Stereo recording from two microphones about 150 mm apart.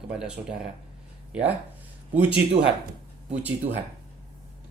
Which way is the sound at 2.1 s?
10° right (ahead or behind).